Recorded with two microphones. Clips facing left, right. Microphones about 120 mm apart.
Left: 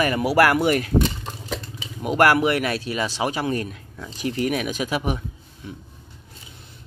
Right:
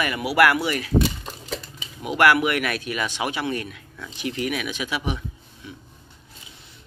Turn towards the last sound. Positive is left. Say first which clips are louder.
# left 3 dB
turn(degrees=45)  # may be behind; listen again after turning